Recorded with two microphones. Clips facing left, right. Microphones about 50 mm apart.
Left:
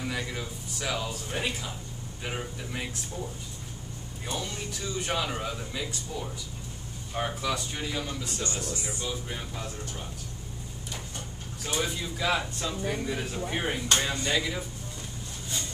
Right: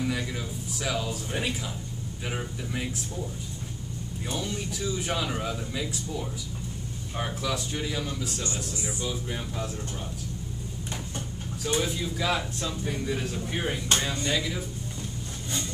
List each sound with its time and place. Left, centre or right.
0.0 s speech: centre
4.3 s speech: centre
11.6 s speech: centre